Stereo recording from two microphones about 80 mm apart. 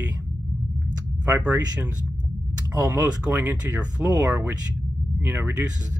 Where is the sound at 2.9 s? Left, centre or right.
Centre.